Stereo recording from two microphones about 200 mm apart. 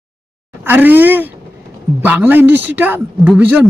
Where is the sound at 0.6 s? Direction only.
10° right (ahead or behind).